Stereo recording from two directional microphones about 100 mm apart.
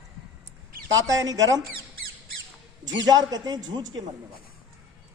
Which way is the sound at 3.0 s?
40° right (ahead or behind).